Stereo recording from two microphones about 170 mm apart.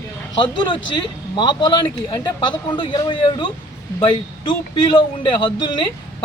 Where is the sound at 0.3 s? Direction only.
30° left (ahead or behind).